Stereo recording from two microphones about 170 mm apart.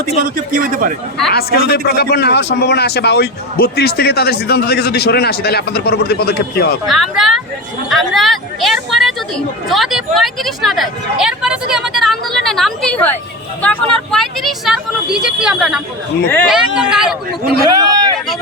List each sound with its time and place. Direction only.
0.2 s speech: 55° right (ahead or behind)
1.3 s speech: 65° left (ahead or behind)
6.8 s speech: centre (ahead or behind)
17.6 s speech: 20° right (ahead or behind)